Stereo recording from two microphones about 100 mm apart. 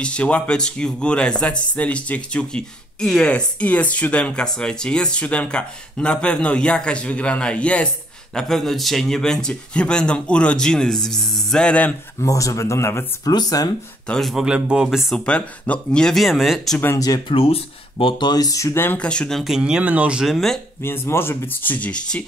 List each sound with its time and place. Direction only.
0.0 s speech: 10° left (ahead or behind)
12.2 s speech: 35° left (ahead or behind)
13.3 s speech: 40° left (ahead or behind)
14.0 s speech: 5° left (ahead or behind)
14.3 s speech: 5° right (ahead or behind)
17.3 s speech: 70° left (ahead or behind); by 19.0 s 20° left (ahead or behind)
19.0 s speech: 5° left (ahead or behind)
20.8 s speech: 25° left (ahead or behind)